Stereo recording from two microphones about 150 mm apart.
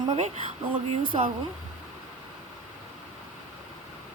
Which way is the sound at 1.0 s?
65° right (ahead or behind).